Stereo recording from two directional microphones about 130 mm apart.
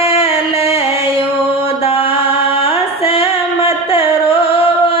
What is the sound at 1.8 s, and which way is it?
Mantra, 45° left (ahead or behind).